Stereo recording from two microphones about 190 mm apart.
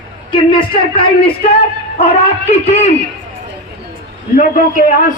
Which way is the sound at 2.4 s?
35° left (ahead or behind).